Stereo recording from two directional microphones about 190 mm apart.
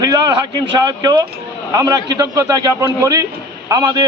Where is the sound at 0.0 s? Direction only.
20° right (ahead or behind).